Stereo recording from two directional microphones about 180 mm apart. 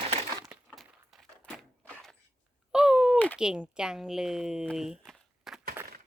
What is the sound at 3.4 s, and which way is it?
Speech, 5° right (ahead or behind).